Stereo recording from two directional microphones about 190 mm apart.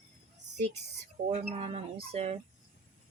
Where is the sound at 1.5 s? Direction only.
35° right (ahead or behind).